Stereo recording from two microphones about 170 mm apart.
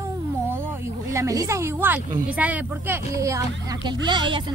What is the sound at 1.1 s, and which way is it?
A woman's voice, 20° right (ahead or behind).